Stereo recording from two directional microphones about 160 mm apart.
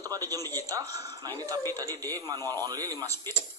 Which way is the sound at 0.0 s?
20° right (ahead or behind).